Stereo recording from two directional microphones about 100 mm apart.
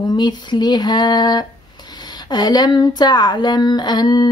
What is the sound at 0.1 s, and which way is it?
Speech, 45° left (ahead or behind).